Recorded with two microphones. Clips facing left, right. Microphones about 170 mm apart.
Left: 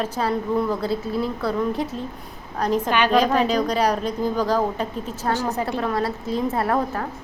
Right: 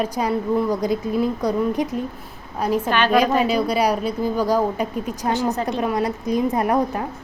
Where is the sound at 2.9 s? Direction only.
15° left (ahead or behind).